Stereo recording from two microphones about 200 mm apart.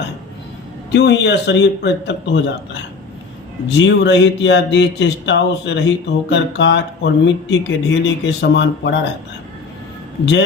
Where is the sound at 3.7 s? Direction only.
60° left (ahead or behind).